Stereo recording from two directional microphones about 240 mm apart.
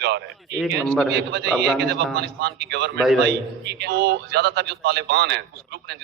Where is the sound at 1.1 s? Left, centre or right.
Right.